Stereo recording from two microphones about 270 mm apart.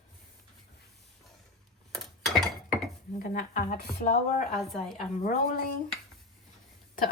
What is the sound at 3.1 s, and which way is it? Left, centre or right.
Speech, left.